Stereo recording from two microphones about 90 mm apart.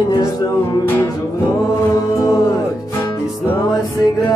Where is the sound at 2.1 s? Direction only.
40° left (ahead or behind).